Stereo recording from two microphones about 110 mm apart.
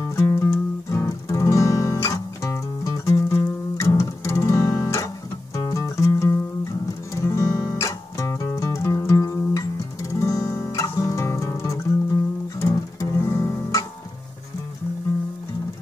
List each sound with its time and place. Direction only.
0.1 s music: 25° left (ahead or behind)
10.2 s guitar: 30° left (ahead or behind)
12.5 s music: 30° left (ahead or behind)
13.2 s guitar: 25° left (ahead or behind)